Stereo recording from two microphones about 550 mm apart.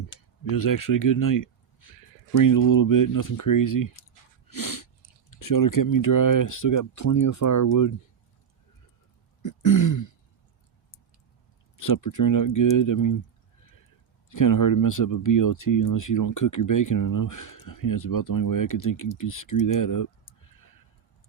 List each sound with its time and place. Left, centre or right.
0.1 s speech: left
4.4 s a sound: left
5.3 s speech: left
9.4 s throat clearing: left
11.8 s speech: left
14.3 s speech: left